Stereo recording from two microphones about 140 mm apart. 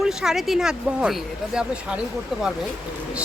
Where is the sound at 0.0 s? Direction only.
5° right (ahead or behind).